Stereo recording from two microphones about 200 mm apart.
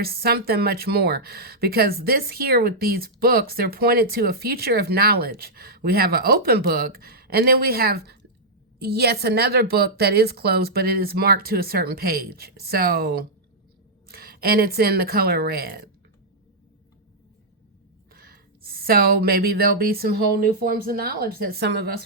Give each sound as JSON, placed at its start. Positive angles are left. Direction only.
{"t": 0.0, "sound": "speech", "side_deg": -50}
{"t": 18.1, "sound": "speech", "side_deg": -50}